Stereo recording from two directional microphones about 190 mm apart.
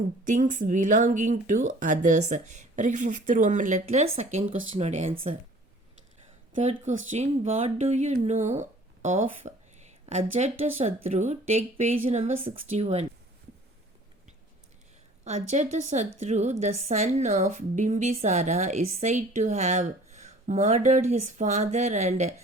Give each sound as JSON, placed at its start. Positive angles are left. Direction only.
{"t": 0.3, "sound": "a woman's voice", "side_deg": -40}
{"t": 6.5, "sound": "a woman's voice", "side_deg": -35}
{"t": 15.2, "sound": "a woman's voice", "side_deg": -35}